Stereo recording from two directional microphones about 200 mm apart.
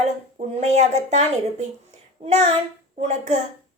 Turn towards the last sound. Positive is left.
turn(degrees=-35)  # may be behind; listen again after turning